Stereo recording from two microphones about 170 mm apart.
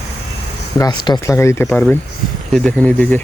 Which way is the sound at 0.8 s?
25° left (ahead or behind).